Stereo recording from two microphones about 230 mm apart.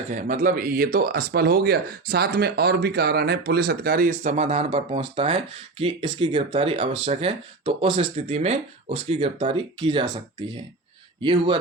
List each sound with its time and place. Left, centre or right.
0.1 s speech: right
11.2 s speech: right